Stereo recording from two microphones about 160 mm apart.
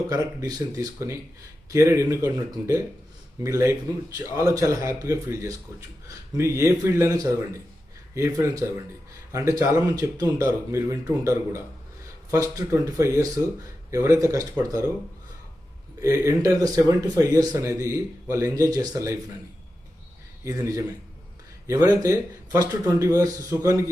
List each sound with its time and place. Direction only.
0.1 s a man's voice: 25° right (ahead or behind)
16.0 s speech: 20° right (ahead or behind)
20.4 s speech: 20° right (ahead or behind)